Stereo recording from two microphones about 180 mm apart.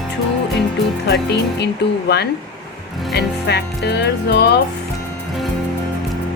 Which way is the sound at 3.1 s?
65° left (ahead or behind).